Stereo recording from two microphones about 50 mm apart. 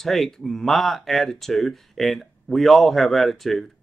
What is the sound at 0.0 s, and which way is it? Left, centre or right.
Speech, centre.